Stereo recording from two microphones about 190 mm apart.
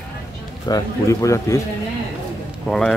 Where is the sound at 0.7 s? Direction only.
15° left (ahead or behind).